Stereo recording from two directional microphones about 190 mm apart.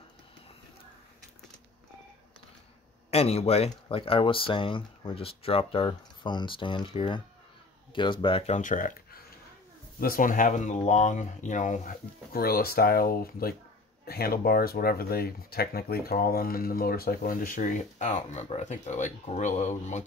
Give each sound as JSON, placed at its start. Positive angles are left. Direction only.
{"t": 3.1, "sound": "speech", "side_deg": 35}